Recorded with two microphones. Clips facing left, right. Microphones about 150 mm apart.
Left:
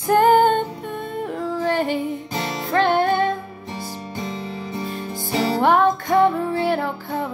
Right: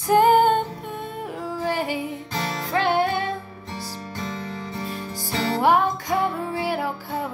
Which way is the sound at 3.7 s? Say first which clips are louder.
Left 2 dB; 15° left (ahead or behind).